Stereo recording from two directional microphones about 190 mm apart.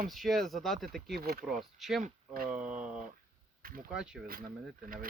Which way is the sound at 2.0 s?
45° right (ahead or behind).